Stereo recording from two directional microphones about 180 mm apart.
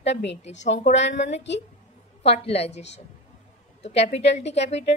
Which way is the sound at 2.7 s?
75° left (ahead or behind).